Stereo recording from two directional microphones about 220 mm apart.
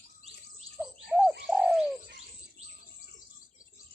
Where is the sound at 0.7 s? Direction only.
Centre (ahead or behind).